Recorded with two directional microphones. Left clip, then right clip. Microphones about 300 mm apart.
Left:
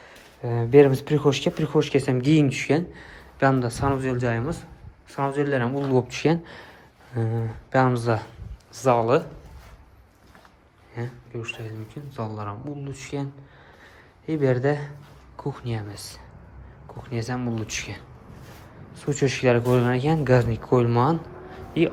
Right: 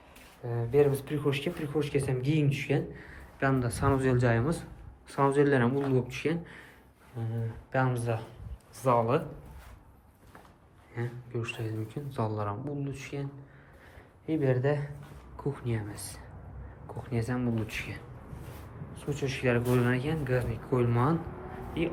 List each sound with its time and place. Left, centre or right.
0.4 s speech: left; by 9.2 s centre
10.9 s speech: centre
14.3 s speech: centre
18.9 s speech: centre